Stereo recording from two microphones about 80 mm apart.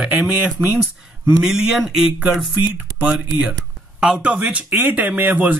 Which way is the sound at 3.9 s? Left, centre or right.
Centre.